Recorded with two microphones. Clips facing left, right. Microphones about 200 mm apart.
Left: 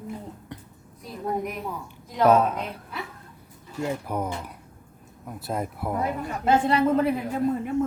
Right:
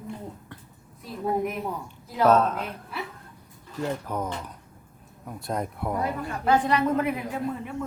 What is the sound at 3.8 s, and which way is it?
Speech, 10° left (ahead or behind).